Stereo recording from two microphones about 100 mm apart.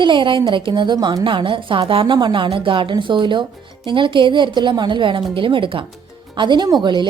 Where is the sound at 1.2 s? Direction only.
55° right (ahead or behind).